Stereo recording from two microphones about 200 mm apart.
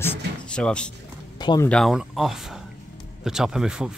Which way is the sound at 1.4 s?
20° left (ahead or behind).